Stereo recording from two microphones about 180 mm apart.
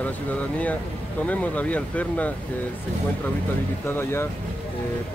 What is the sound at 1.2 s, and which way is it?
Speech, 10° left (ahead or behind).